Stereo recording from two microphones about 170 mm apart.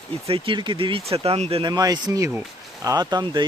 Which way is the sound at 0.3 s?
30° right (ahead or behind).